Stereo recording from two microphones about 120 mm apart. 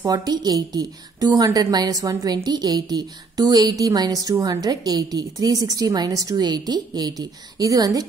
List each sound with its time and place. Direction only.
0.0 s a woman's voice: 35° right (ahead or behind)